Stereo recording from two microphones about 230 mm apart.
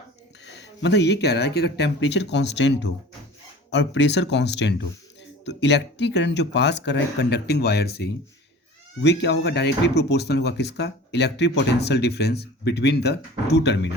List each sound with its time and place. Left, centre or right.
0.4 s speech: left